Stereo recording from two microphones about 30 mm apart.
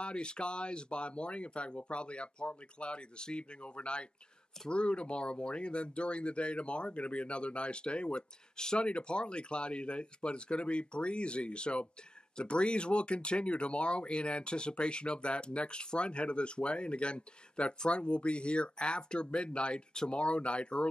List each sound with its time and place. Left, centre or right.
0.0 s speech: left
5.1 s speech: left
5.5 s speech: left